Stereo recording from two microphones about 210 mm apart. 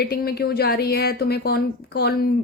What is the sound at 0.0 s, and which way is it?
Speech, 45° left (ahead or behind).